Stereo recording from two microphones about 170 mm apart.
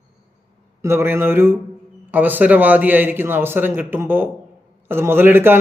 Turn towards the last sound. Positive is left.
turn(degrees=-10)  # may be behind; listen again after turning